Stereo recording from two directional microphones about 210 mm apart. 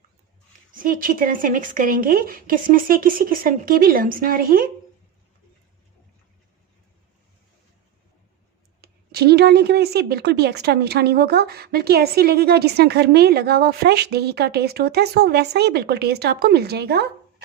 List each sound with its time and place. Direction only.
0.7 s speech: 40° right (ahead or behind)
8.8 s speech: 50° right (ahead or behind)